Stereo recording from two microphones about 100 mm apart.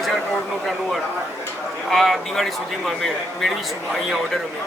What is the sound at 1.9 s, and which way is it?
Speech, centre (ahead or behind).